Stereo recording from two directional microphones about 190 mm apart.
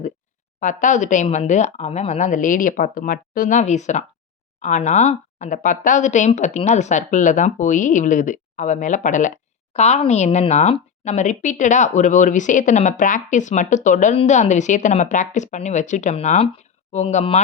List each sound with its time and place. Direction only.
0.6 s speech: 40° left (ahead or behind)